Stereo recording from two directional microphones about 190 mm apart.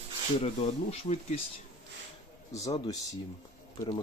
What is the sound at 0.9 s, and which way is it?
Speech, 30° left (ahead or behind).